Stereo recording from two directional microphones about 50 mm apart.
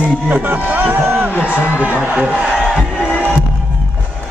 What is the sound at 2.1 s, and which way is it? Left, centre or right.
Speech, right.